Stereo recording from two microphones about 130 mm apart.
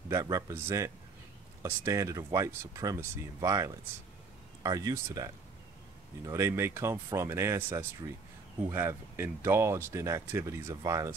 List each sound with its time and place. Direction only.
0.1 s speech: 25° right (ahead or behind)